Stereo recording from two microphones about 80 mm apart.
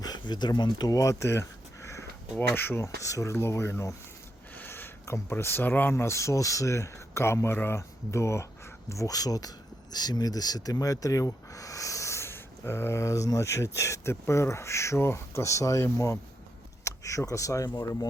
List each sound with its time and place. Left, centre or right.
0.0 s speech: left
4.5 s a sound: left
5.3 s speech: left